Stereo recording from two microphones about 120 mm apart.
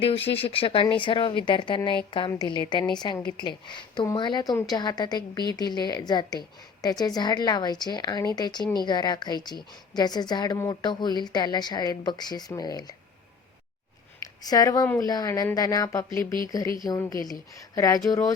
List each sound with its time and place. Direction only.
0.0 s a woman's voice: 50° left (ahead or behind); by 13.0 s 30° left (ahead or behind)
14.2 s a sound: 30° left (ahead or behind)
14.9 s a woman's voice: 30° left (ahead or behind)